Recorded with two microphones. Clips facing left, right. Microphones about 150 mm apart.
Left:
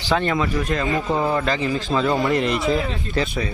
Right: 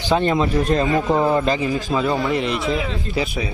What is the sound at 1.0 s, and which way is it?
Speech, 20° right (ahead or behind).